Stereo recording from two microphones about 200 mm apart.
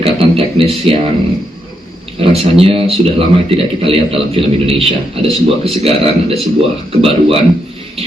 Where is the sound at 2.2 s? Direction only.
30° right (ahead or behind).